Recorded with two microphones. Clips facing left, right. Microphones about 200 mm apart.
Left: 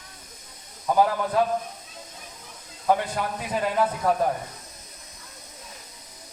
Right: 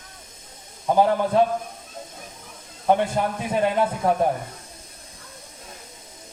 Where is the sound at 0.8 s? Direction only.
25° right (ahead or behind).